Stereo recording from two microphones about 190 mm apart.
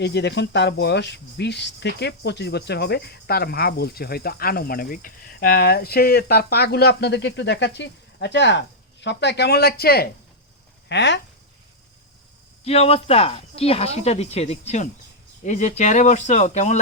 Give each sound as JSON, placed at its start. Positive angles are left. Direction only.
{"t": 0.0, "sound": "speech", "side_deg": 65}
{"t": 10.8, "sound": "speech", "side_deg": 65}
{"t": 12.6, "sound": "speech", "side_deg": 30}